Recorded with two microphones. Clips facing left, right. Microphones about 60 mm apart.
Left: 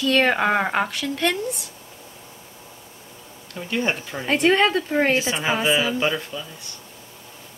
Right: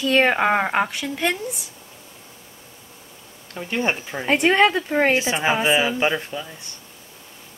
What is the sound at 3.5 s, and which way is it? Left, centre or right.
A woman's voice, right.